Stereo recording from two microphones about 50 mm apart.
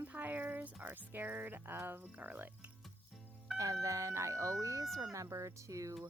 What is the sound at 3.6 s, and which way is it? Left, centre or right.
Speech, right.